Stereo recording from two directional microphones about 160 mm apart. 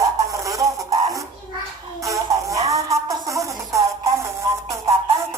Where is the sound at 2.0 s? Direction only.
20° right (ahead or behind).